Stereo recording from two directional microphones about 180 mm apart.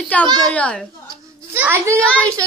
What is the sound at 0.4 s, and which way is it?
Speech, 5° left (ahead or behind).